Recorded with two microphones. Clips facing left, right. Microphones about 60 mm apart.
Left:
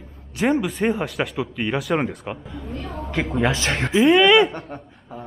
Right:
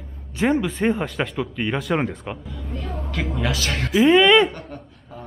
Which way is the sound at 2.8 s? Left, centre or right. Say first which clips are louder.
Even; centre.